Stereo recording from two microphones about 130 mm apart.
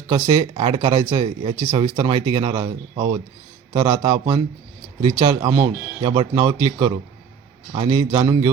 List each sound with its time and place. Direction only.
0.1 s speech: 35° right (ahead or behind)
2.0 s speech: 35° right (ahead or behind)